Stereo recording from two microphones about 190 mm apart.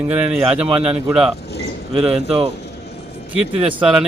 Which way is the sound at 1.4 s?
60° left (ahead or behind).